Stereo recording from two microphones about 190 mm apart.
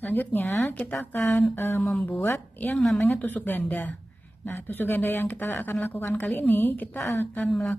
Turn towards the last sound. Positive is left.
turn(degrees=5)  # may be behind; listen again after turning